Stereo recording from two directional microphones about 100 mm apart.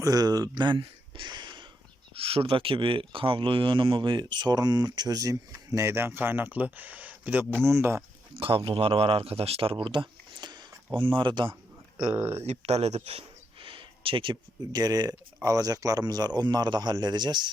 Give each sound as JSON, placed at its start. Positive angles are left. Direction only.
{"t": 0.0, "sound": "speech", "side_deg": -40}
{"t": 2.1, "sound": "speech", "side_deg": -70}
{"t": 8.4, "sound": "a man's voice", "side_deg": -65}
{"t": 11.0, "sound": "speech", "side_deg": -55}
{"t": 12.1, "sound": "speech", "side_deg": -25}
{"t": 12.4, "sound": "speech", "side_deg": -90}